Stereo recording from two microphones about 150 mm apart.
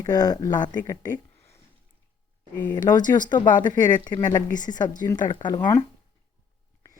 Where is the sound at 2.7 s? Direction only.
25° left (ahead or behind).